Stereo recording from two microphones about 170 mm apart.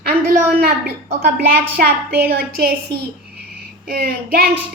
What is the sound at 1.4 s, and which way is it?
A woman's voice, 65° right (ahead or behind).